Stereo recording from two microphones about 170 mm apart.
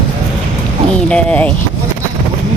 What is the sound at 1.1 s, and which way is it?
Speech, 5° left (ahead or behind).